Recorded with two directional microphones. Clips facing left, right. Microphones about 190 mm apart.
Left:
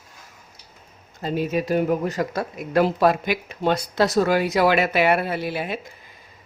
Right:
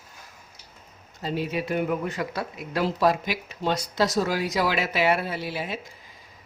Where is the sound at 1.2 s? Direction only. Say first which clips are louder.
Left 4 dB; 50° left (ahead or behind).